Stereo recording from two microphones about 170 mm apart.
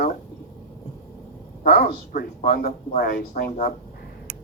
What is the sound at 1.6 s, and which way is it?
Speech, 65° left (ahead or behind).